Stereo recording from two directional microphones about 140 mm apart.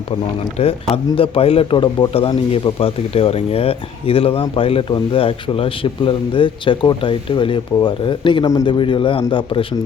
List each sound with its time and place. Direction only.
0.6 s a man's voice: 40° left (ahead or behind)